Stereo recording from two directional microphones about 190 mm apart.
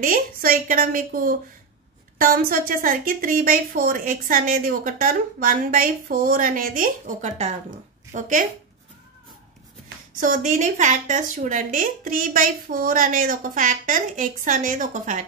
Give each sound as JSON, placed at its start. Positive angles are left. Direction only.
{"t": 0.0, "sound": "a woman's voice", "side_deg": -50}
{"t": 10.2, "sound": "a woman's voice", "side_deg": -40}